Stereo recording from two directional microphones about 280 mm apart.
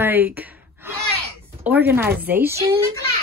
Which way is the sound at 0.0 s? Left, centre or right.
Centre.